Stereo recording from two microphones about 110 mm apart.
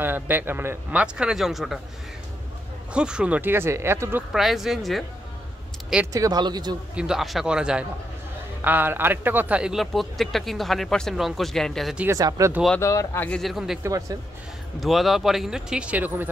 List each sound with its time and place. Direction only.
0.0 s a man's voice: 15° right (ahead or behind)
1.0 s a man's voice: 5° right (ahead or behind)
2.9 s speech: 10° right (ahead or behind)
4.3 s a man's voice: centre (ahead or behind)
6.1 s speech: 35° right (ahead or behind)
7.0 s a man's voice: 5° right (ahead or behind)
12.1 s speech: 30° right (ahead or behind)
12.8 s speech: 25° left (ahead or behind)
13.4 s a man's voice: centre (ahead or behind)
13.8 s speech: 30° right (ahead or behind)
14.8 s a man's voice: centre (ahead or behind)